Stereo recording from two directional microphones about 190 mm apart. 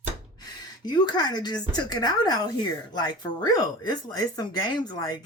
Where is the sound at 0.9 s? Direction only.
20° left (ahead or behind).